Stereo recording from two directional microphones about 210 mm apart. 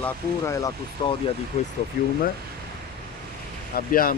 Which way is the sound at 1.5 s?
30° left (ahead or behind).